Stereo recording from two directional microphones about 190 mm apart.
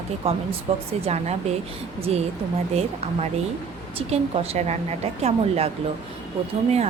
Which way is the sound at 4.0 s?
30° right (ahead or behind).